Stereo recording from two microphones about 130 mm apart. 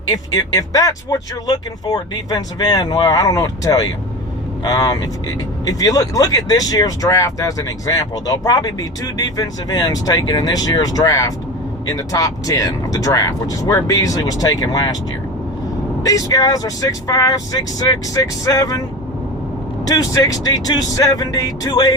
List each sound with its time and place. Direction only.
0.1 s speech: 30° left (ahead or behind)
16.0 s speech: 30° left (ahead or behind)
19.8 s speech: 25° left (ahead or behind)